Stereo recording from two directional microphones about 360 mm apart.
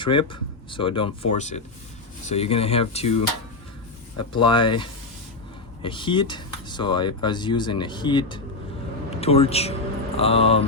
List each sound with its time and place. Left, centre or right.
0.0 s speech: centre
4.3 s a man's voice: centre